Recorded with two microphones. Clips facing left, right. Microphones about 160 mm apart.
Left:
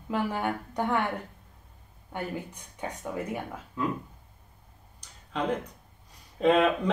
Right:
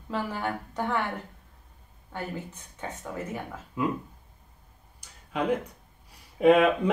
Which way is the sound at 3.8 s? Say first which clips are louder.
Right 2 dB; 10° right (ahead or behind).